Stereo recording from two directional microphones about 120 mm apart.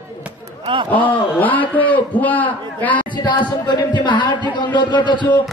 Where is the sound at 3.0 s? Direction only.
40° left (ahead or behind).